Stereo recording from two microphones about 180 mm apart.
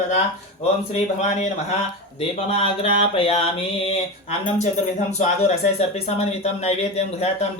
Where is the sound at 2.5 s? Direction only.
30° left (ahead or behind).